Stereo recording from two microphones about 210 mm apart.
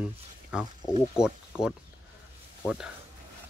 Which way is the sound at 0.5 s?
5° right (ahead or behind).